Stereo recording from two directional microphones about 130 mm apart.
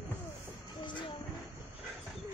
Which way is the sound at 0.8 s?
35° left (ahead or behind).